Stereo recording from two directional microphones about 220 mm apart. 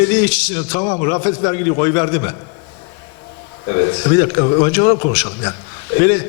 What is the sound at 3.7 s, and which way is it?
A man's voice, 25° left (ahead or behind).